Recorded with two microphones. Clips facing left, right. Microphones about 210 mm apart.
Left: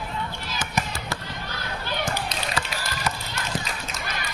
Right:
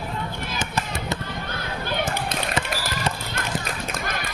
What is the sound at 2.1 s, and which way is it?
Run, 55° right (ahead or behind).